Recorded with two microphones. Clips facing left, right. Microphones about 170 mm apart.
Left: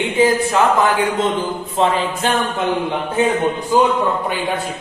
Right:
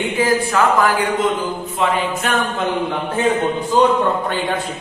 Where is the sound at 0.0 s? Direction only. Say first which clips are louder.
Left 2 dB; 20° left (ahead or behind).